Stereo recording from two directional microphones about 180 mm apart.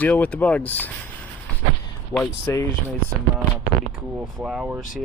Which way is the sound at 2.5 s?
20° left (ahead or behind).